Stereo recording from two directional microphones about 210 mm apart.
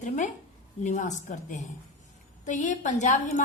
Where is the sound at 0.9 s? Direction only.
35° left (ahead or behind).